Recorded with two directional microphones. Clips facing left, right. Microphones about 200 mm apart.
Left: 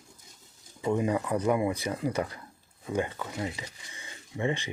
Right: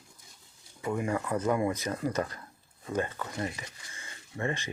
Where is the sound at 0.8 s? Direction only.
20° left (ahead or behind).